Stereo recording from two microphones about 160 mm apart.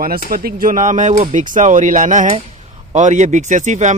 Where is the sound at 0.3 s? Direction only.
65° right (ahead or behind).